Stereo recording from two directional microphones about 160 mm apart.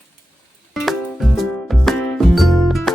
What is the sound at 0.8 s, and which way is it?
Music, centre (ahead or behind).